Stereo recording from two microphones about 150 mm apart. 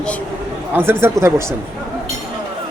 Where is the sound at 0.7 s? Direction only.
15° right (ahead or behind).